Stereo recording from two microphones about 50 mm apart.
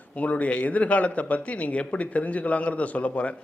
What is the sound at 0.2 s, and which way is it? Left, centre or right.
Speech, left.